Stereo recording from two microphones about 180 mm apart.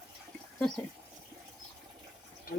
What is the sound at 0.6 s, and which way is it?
Speech, centre (ahead or behind).